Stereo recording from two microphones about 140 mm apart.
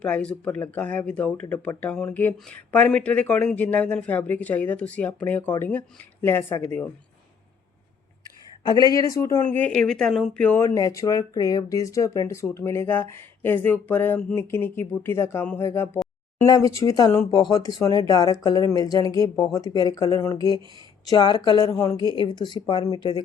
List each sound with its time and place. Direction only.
0.0 s speech: 5° left (ahead or behind)
8.6 s speech: 25° left (ahead or behind); by 10.6 s 10° left (ahead or behind)
10.6 s speech: 25° left (ahead or behind)